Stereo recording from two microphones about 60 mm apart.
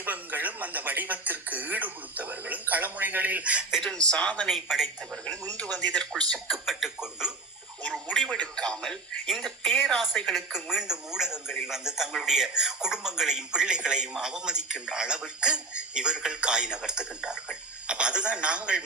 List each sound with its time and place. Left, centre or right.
0.0 s speech: right
3.8 s speech: centre
4.4 s speech: centre
5.5 s speech: centre
6.5 s speech: centre
8.1 s speech: centre
10.5 s a man's voice: centre